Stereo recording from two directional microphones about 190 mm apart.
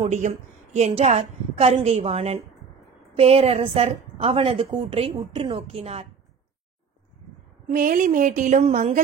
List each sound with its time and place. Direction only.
0.0 s a woman's voice: 35° right (ahead or behind)
7.7 s a woman's voice: 45° right (ahead or behind)